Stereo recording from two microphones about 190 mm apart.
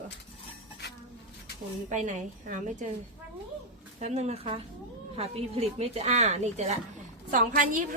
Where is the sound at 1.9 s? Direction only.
40° right (ahead or behind).